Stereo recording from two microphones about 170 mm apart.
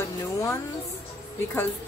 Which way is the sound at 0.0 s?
15° left (ahead or behind).